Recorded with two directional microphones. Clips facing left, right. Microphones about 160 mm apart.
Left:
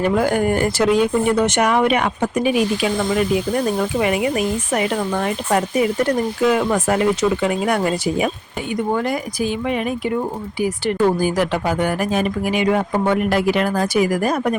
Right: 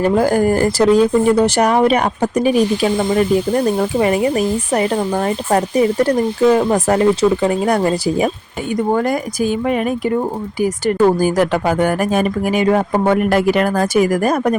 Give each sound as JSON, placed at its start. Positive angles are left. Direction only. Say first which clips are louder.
{"t": 0.0, "sound": "speech", "louder": "right 4 dB", "side_deg": -35}
{"t": 8.9, "sound": "speech", "louder": "right 5 dB", "side_deg": -45}